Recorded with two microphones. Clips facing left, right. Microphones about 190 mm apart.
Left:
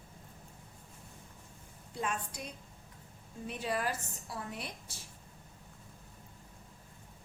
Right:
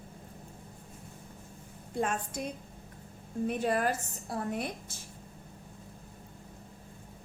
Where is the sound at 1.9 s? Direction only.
50° right (ahead or behind).